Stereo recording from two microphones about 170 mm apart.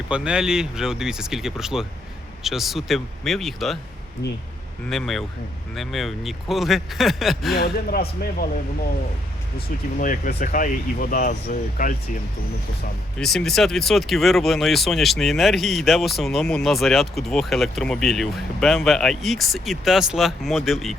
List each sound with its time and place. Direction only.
0.1 s speech: 5° right (ahead or behind)
4.9 s speech: centre (ahead or behind)
7.6 s speech: 65° left (ahead or behind)
9.6 s speech: 55° left (ahead or behind)
13.1 s speech: 5° left (ahead or behind)